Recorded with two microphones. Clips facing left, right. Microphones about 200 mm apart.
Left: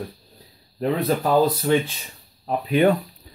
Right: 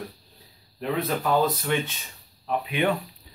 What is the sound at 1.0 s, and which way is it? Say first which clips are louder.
Speech: left 4 dB; 35° left (ahead or behind).